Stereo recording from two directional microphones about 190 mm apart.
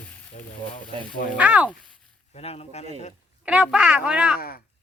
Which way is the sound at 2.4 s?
30° left (ahead or behind).